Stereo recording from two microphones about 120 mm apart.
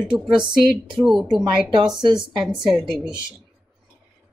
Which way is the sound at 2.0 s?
40° right (ahead or behind).